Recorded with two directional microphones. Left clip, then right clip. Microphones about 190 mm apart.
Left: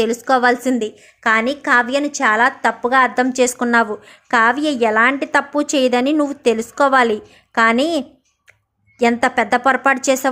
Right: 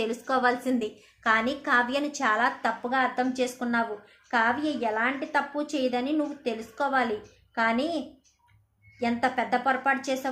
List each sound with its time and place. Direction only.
0.0 s a woman's voice: 35° left (ahead or behind)